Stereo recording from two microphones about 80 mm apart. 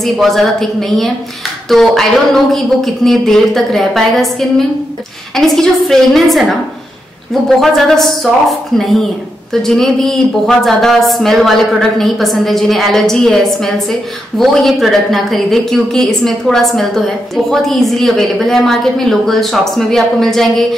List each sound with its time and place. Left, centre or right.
0.0 s a woman's voice: centre
7.4 s a woman's voice: centre